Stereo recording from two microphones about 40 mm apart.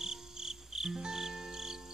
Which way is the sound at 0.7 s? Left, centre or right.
Centre.